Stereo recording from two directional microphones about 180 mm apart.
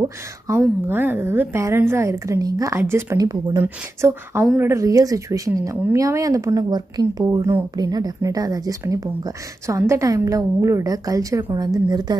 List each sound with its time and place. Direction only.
0.8 s a woman's voice: 10° right (ahead or behind)